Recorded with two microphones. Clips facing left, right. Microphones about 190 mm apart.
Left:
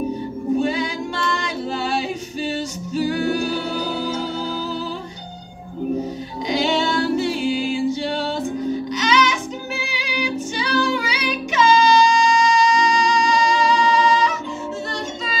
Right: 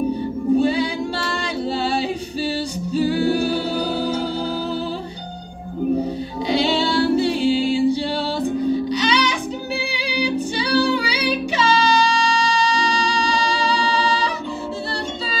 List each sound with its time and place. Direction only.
0.6 s singing: 35° right (ahead or behind)
3.8 s music: 35° right (ahead or behind)
6.5 s music: 30° right (ahead or behind)